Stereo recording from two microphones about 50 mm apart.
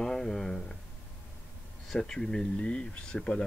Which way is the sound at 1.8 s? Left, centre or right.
Centre.